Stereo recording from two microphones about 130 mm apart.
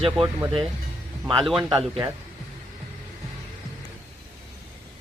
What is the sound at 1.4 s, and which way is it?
Speech, centre (ahead or behind).